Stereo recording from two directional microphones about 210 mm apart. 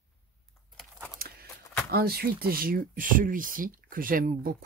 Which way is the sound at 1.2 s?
45° right (ahead or behind).